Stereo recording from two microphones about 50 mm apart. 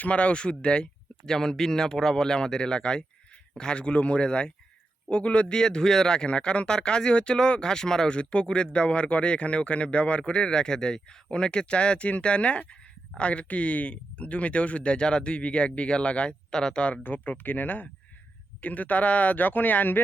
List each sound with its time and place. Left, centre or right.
0.0 s a man's voice: left
17.0 s speech: left